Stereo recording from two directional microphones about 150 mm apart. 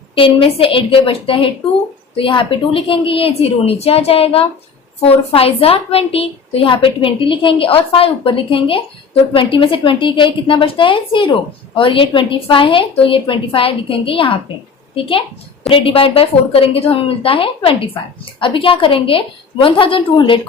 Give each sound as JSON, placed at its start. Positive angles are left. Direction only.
{"t": 0.2, "sound": "a woman's voice", "side_deg": 35}